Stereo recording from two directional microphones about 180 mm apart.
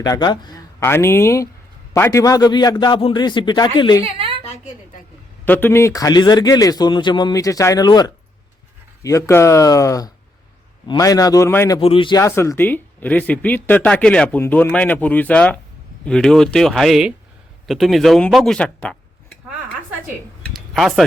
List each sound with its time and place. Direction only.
0.0 s speech: 20° left (ahead or behind)
0.8 s speech: 15° left (ahead or behind)
4.0 s a sound: 30° right (ahead or behind)
5.5 s speech: 10° left (ahead or behind)
11.8 s speech: 30° left (ahead or behind); by 17.2 s centre (ahead or behind)
17.7 s a sound: centre (ahead or behind)